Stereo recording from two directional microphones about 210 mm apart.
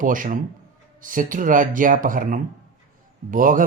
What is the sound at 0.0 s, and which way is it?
Speech, 40° right (ahead or behind).